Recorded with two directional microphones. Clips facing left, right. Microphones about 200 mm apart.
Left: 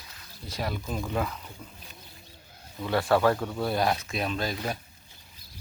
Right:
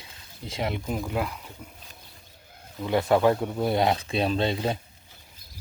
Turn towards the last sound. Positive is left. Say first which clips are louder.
# right 5 dB
turn(degrees=-25)  # may be behind; listen again after turning